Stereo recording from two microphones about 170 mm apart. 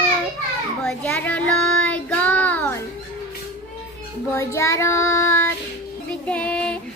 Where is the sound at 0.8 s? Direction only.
5° left (ahead or behind).